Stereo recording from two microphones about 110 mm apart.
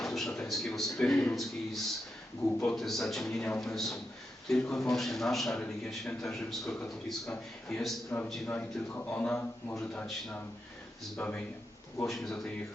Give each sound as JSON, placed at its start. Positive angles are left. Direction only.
{"t": 0.0, "sound": "a man's voice", "side_deg": 5}
{"t": 2.7, "sound": "a man's voice", "side_deg": 0}
{"t": 8.4, "sound": "a man's voice", "side_deg": 15}
{"t": 12.0, "sound": "a man's voice", "side_deg": 0}